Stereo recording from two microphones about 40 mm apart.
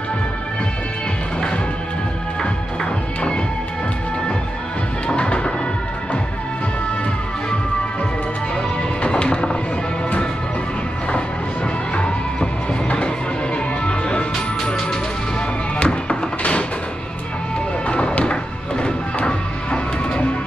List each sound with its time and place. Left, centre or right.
2.4 s music: left
5.0 s music: left
9.0 s music: left
11.9 s music: left
15.8 s music: left
17.8 s music: left